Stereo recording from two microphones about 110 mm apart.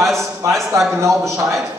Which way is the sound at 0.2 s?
25° right (ahead or behind).